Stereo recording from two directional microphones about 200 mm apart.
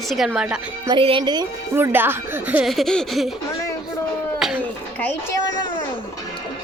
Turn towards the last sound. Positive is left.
turn(degrees=15)  # may be behind; listen again after turning